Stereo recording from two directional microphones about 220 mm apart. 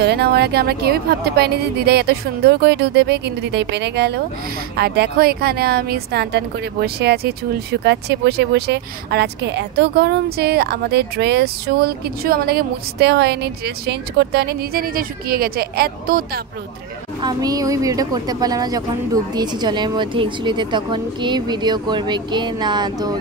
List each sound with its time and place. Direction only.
0.0 s speech: 50° right (ahead or behind)
17.2 s a woman's voice: 15° right (ahead or behind)